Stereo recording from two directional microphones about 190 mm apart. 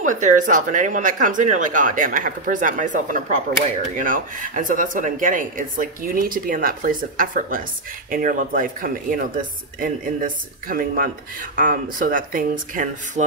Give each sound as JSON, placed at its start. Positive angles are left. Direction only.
{"t": 0.0, "sound": "speech", "side_deg": -40}